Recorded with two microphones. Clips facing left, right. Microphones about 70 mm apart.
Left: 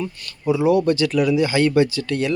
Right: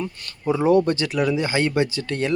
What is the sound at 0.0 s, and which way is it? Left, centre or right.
Speech, right.